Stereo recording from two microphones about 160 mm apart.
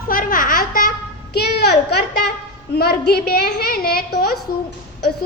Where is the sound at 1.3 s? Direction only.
90° left.